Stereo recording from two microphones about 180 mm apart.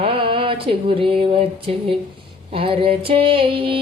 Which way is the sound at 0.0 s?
30° right (ahead or behind).